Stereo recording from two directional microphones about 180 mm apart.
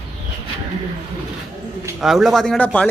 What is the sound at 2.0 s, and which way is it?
Speech, centre (ahead or behind).